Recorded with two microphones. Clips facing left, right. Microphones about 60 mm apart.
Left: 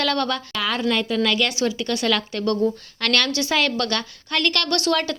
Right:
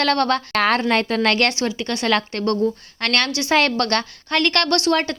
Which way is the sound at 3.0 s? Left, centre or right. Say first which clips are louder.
Even; right.